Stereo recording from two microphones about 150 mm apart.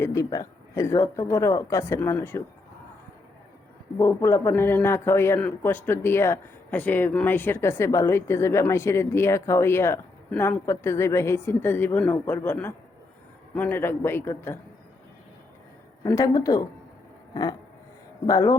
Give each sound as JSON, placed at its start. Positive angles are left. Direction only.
{"t": 0.0, "sound": "speech", "side_deg": 20}
{"t": 3.9, "sound": "a man's voice", "side_deg": 20}
{"t": 16.0, "sound": "speech", "side_deg": 25}
{"t": 18.3, "sound": "speech", "side_deg": 20}